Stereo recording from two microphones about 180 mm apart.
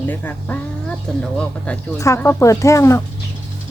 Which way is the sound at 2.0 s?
15° left (ahead or behind).